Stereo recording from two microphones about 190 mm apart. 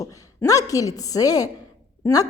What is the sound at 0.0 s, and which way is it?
A woman's voice, 15° left (ahead or behind).